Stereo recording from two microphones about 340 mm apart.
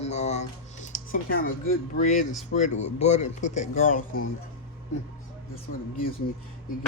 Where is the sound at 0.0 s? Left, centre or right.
Centre.